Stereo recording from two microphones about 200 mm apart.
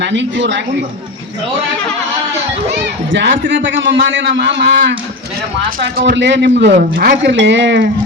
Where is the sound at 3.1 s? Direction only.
65° right (ahead or behind).